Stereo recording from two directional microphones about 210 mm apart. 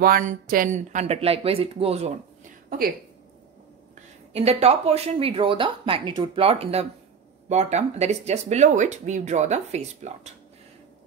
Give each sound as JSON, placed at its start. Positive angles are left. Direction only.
{"t": 0.0, "sound": "speech", "side_deg": -40}
{"t": 4.3, "sound": "speech", "side_deg": -30}